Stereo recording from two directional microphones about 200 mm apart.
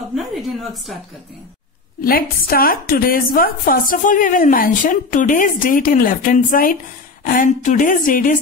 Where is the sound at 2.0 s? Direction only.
45° left (ahead or behind).